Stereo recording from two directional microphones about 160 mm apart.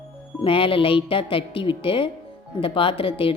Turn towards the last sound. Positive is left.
turn(degrees=35)  # may be behind; listen again after turning